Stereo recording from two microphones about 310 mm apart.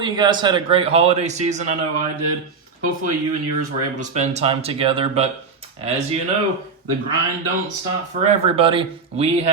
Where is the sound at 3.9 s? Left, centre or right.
Right.